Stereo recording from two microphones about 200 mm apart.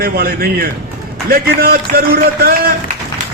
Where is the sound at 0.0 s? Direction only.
50° right (ahead or behind).